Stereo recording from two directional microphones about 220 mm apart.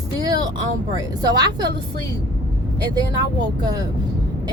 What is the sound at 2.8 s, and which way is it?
Speech, 20° right (ahead or behind).